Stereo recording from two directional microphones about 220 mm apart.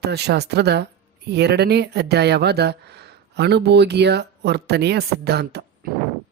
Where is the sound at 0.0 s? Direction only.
50° right (ahead or behind).